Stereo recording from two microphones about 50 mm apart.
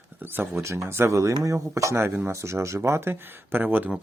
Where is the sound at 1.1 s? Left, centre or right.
Right.